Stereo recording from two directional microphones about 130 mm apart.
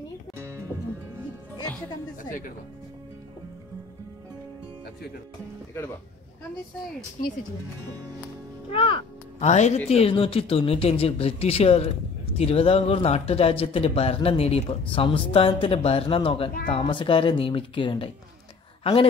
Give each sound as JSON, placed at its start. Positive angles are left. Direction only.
{"t": 8.7, "sound": "speech", "side_deg": 45}
{"t": 9.4, "sound": "speech", "side_deg": 60}